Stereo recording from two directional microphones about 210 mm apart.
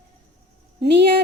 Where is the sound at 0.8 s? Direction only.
55° right (ahead or behind).